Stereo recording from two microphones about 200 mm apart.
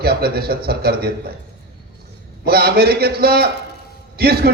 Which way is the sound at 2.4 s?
50° right (ahead or behind).